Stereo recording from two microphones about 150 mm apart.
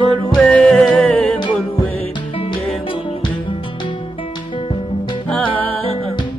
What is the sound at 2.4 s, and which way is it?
Music, 35° left (ahead or behind).